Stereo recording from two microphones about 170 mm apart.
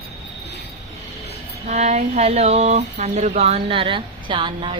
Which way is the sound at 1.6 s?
40° right (ahead or behind).